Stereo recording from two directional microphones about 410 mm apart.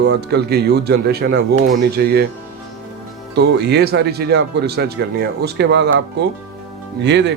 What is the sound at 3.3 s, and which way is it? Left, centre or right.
A man's voice, right.